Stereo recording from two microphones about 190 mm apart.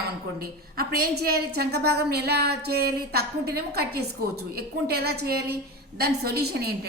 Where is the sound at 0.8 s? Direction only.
55° right (ahead or behind).